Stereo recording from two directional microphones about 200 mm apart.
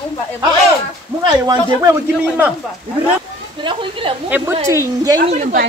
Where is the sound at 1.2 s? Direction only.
20° right (ahead or behind).